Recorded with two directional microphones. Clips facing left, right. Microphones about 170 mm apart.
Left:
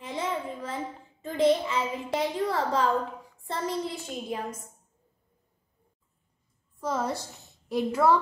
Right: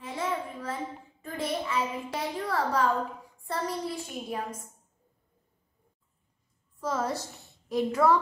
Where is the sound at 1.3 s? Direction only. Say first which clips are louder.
Left 7 dB; 20° left (ahead or behind).